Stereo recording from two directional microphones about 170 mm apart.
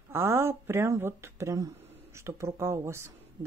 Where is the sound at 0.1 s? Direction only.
15° right (ahead or behind).